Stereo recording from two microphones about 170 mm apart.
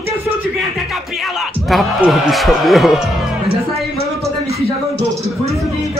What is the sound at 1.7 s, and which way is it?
Speech, centre (ahead or behind).